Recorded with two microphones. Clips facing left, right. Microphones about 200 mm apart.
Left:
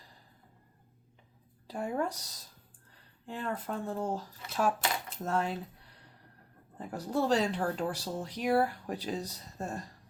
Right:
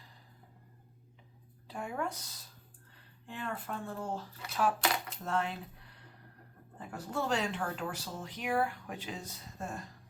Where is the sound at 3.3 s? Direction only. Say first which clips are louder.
Left 4 dB; 40° left (ahead or behind).